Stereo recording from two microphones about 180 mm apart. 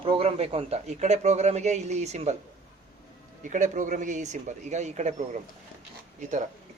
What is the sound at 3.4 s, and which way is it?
Speech, 45° right (ahead or behind).